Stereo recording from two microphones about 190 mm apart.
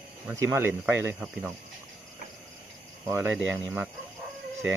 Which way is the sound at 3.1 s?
10° right (ahead or behind).